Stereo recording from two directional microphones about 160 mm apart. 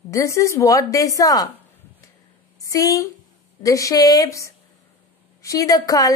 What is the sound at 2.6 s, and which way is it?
A woman's voice, 20° left (ahead or behind).